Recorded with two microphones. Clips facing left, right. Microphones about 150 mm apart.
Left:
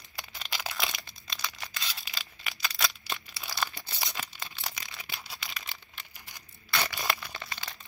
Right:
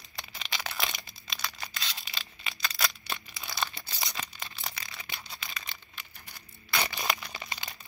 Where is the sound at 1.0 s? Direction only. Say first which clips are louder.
Even; centre (ahead or behind).